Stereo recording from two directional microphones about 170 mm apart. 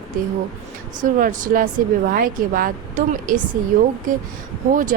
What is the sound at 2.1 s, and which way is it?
Speech, 55° right (ahead or behind).